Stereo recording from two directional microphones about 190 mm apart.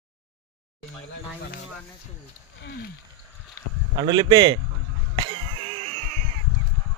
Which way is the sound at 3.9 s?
20° right (ahead or behind).